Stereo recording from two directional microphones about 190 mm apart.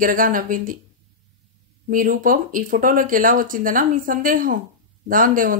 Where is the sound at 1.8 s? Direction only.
45° right (ahead or behind).